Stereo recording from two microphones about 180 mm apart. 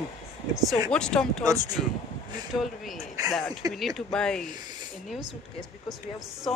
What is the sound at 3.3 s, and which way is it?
Speech, centre (ahead or behind).